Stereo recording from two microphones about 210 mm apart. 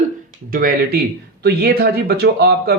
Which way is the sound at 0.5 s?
45° right (ahead or behind).